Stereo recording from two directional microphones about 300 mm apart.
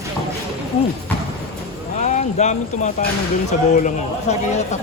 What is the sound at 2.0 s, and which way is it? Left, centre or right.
Speech, left.